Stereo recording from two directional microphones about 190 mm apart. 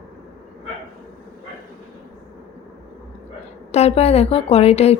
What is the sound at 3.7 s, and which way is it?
A woman's voice, 35° left (ahead or behind).